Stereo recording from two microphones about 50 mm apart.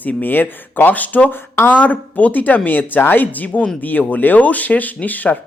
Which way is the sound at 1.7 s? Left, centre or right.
Left.